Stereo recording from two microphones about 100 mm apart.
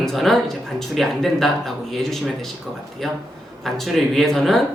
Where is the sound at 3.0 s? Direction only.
Centre (ahead or behind).